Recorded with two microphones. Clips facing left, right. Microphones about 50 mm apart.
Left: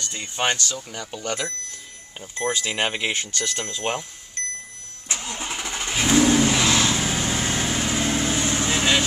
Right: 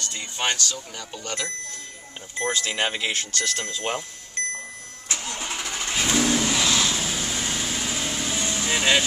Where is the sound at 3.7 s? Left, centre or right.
Centre.